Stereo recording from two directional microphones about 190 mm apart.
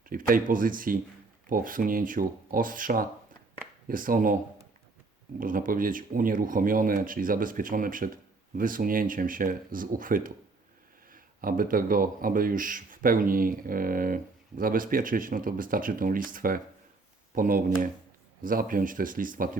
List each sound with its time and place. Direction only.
0.0 s speech: 45° right (ahead or behind)
5.4 s speech: 45° right (ahead or behind)